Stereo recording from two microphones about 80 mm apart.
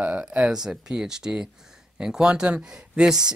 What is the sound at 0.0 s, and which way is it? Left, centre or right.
Speech, centre.